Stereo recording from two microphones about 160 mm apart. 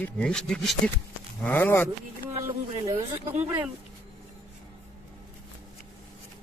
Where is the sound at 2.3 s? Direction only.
40° right (ahead or behind).